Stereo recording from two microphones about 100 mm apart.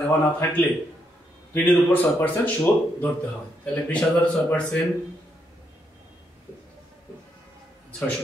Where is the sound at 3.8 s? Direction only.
15° left (ahead or behind).